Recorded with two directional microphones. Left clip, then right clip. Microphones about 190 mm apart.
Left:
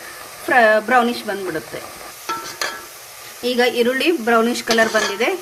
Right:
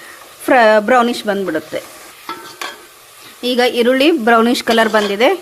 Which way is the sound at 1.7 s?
40° right (ahead or behind).